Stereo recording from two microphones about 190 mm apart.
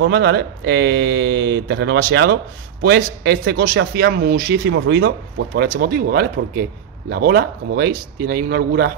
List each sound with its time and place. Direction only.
0.0 s a man's voice: 65° right (ahead or behind)